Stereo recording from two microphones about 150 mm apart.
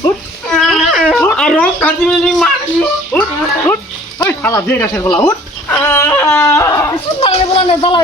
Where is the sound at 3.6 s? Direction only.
15° left (ahead or behind).